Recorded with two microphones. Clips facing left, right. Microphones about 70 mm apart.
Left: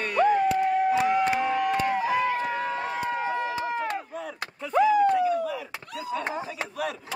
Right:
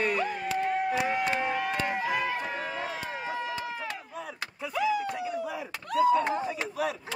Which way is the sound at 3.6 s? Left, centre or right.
Left.